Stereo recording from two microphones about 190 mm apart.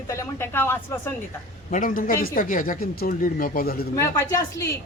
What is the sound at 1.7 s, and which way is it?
Speech, 45° left (ahead or behind).